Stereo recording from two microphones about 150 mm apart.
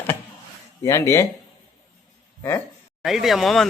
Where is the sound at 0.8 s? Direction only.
20° left (ahead or behind).